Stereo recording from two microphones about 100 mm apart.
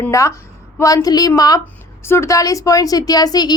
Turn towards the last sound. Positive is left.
turn(degrees=40)  # may be behind; listen again after turning